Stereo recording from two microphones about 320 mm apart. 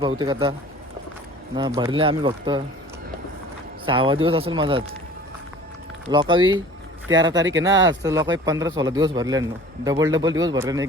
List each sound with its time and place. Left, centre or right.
0.2 s a man's voice: centre
1.5 s a man's voice: centre
3.8 s a man's voice: centre
6.1 s a man's voice: centre